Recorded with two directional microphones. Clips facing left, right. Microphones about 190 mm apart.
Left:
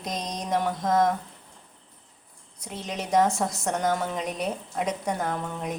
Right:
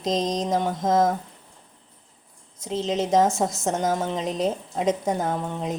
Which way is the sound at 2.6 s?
25° right (ahead or behind).